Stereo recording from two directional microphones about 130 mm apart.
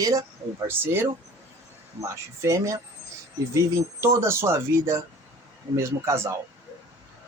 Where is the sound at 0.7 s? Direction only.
15° right (ahead or behind).